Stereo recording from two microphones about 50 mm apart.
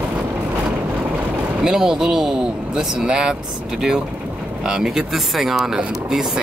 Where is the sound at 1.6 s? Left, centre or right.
Centre.